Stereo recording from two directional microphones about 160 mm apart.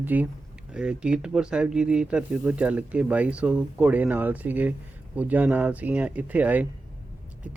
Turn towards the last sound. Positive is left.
turn(degrees=-10)  # may be behind; listen again after turning